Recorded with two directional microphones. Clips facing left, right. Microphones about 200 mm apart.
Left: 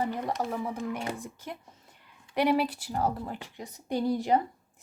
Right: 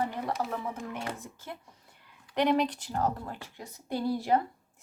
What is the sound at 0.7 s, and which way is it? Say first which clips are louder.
Speech: left 4 dB; 15° left (ahead or behind).